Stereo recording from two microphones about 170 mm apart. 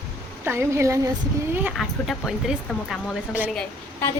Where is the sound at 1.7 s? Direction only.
Centre (ahead or behind).